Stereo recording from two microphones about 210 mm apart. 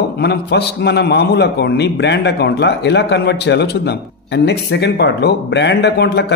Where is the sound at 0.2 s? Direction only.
50° left (ahead or behind).